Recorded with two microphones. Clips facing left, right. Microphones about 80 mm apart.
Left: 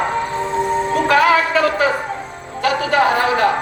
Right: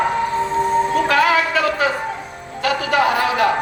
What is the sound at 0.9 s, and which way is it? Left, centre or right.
Music, left.